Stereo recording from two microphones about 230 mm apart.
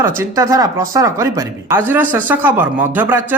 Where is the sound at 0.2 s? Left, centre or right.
Centre.